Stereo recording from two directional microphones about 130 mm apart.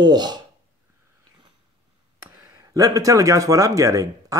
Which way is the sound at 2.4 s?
20° right (ahead or behind).